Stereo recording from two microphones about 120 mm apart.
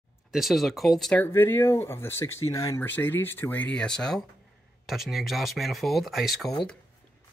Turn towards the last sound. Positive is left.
turn(degrees=0)  # may be behind; listen again after turning